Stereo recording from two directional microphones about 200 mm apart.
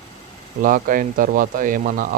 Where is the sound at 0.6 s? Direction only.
40° right (ahead or behind).